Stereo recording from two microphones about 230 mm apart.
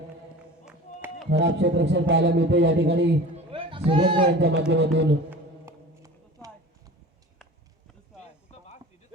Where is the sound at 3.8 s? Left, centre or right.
Right.